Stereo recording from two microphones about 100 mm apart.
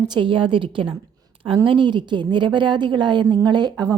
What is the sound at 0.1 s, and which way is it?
A woman's voice, 55° right (ahead or behind).